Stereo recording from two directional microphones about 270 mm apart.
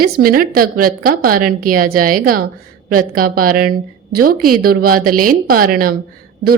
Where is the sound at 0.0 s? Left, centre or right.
Right.